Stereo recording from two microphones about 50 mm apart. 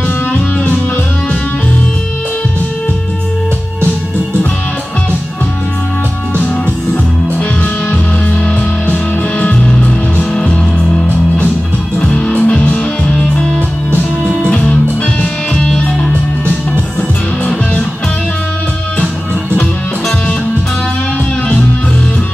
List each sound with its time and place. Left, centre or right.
8.9 s music: left